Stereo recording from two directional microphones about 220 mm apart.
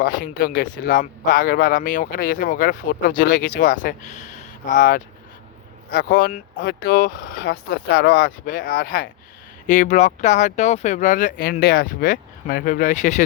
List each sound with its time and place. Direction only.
0.0 s speech: 40° left (ahead or behind)